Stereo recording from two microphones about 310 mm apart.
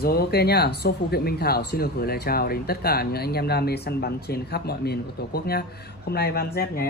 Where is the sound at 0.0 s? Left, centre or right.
Left.